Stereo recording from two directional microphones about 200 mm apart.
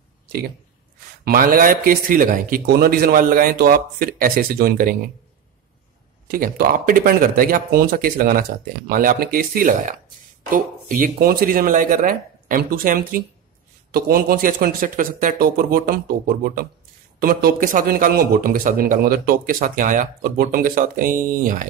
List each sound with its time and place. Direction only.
1.2 s a man's voice: 45° right (ahead or behind)
6.2 s a man's voice: 45° right (ahead or behind)